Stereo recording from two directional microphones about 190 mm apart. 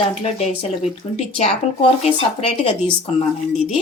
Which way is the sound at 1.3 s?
30° left (ahead or behind).